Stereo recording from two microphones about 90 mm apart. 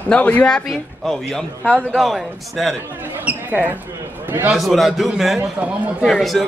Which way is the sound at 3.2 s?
15° right (ahead or behind).